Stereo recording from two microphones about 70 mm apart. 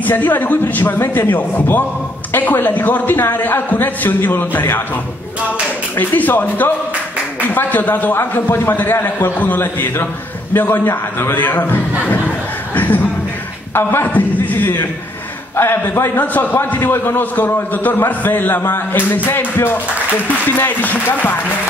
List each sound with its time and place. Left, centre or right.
0.0 s a man's voice: left
0.9 s a man's voice: left
5.9 s a man's voice: left
12.1 s a sound: left
13.7 s a man's voice: left